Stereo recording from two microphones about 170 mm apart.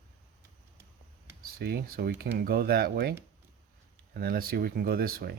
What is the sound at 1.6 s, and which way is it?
Speech, 65° right (ahead or behind).